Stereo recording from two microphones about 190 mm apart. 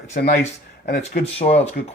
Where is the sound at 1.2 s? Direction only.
35° left (ahead or behind).